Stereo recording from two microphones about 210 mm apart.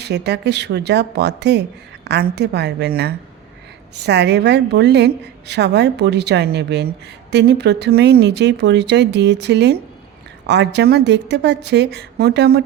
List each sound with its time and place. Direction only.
0.0 s a woman's voice: 55° right (ahead or behind)